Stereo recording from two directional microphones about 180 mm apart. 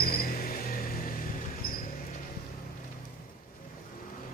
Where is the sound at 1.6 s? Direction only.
55° left (ahead or behind).